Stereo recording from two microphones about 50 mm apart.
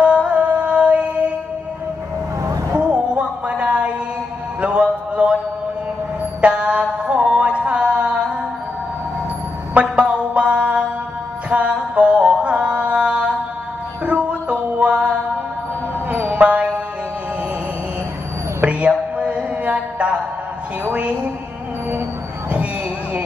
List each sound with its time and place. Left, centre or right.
0.0 s music: right
2.7 s a sound: right
6.4 s music: right
9.8 s music: right
14.8 s mantra: right
16.1 s music: right
18.9 s mantra: centre
20.9 s music: right